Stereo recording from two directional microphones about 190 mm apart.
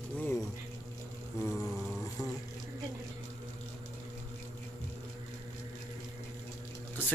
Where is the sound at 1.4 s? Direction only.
Centre (ahead or behind).